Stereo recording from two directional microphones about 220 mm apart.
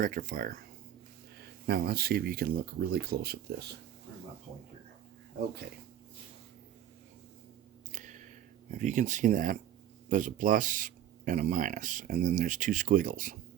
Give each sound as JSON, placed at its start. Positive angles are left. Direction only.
{"t": 0.0, "sound": "speech", "side_deg": -40}
{"t": 1.6, "sound": "speech", "side_deg": -45}
{"t": 7.9, "sound": "a sound", "side_deg": -35}
{"t": 8.7, "sound": "speech", "side_deg": -35}